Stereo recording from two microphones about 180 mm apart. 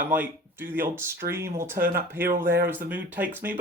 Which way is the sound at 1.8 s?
50° right (ahead or behind).